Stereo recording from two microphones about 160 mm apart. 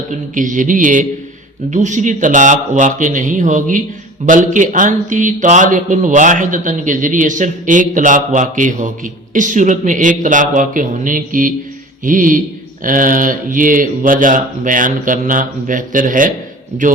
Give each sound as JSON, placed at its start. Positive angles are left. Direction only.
{"t": 0.3, "sound": "a man's voice", "side_deg": -55}